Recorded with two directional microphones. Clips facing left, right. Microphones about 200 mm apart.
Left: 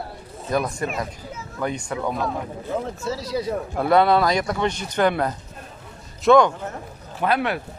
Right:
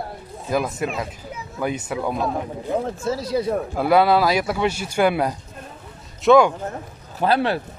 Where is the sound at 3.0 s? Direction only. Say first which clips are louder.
Right 3 dB; 50° right (ahead or behind).